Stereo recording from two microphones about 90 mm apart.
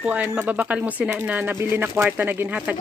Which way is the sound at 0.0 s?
15° right (ahead or behind).